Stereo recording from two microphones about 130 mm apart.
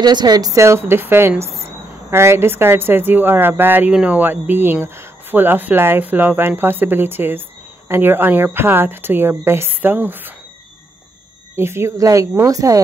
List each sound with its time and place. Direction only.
0.0 s a woman's voice: 35° right (ahead or behind); by 10.3 s 15° right (ahead or behind)
11.5 s a woman's voice: 20° right (ahead or behind)